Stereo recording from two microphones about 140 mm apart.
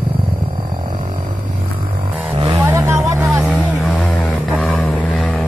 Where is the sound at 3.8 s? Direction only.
5° left (ahead or behind).